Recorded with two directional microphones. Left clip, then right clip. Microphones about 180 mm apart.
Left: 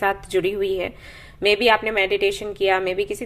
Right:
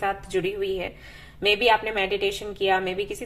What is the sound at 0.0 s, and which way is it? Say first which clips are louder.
A woman's voice: left 5 dB; 40° left (ahead or behind).